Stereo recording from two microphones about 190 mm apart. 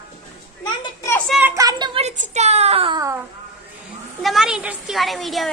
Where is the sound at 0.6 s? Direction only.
20° left (ahead or behind).